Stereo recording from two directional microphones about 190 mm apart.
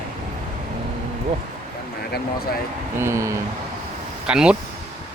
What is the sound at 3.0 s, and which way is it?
Speech, 15° right (ahead or behind).